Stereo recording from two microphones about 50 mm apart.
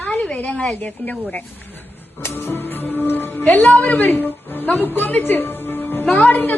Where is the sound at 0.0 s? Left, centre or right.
Left.